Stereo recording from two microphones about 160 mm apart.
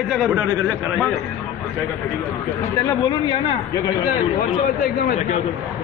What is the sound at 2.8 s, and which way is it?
Speech, 20° left (ahead or behind).